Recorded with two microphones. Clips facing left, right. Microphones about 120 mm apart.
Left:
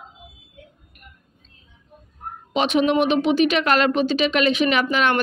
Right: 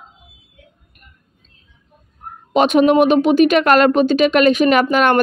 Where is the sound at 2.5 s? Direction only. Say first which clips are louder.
Right 7 dB; 45° right (ahead or behind).